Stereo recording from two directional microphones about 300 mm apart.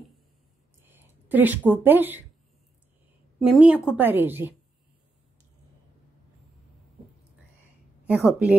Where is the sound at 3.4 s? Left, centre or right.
Centre.